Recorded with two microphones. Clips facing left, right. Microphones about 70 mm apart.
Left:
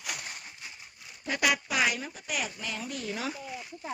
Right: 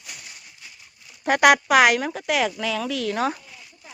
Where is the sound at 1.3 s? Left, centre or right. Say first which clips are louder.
Right 12 dB; right.